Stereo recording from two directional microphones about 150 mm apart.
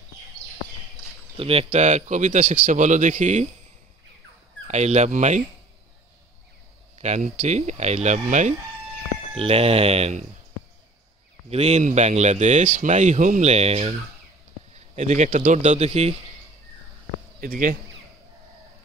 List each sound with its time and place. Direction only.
1.4 s speech: 40° right (ahead or behind)
4.6 s speech: 50° right (ahead or behind)
7.0 s speech: 50° right (ahead or behind)
9.3 s speech: 40° right (ahead or behind)
11.5 s speech: 45° right (ahead or behind)
15.0 s speech: 50° right (ahead or behind)
17.4 s speech: 65° right (ahead or behind)